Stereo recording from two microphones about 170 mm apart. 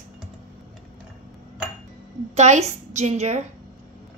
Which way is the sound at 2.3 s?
40° right (ahead or behind).